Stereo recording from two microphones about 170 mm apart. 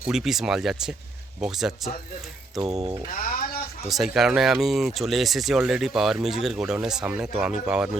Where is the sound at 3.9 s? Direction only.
Centre (ahead or behind).